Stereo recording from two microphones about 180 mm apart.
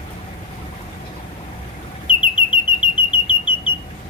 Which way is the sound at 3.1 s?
25° left (ahead or behind).